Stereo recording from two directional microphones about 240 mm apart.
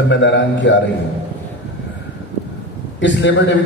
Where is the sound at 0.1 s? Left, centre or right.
Left.